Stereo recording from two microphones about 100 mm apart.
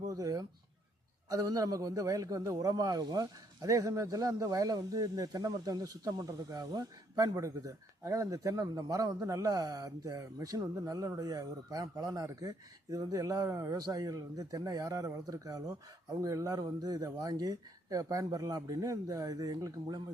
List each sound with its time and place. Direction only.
0.1 s a man's voice: 35° right (ahead or behind)